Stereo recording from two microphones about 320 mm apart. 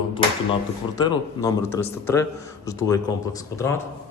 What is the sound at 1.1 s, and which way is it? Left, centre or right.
Speech, centre.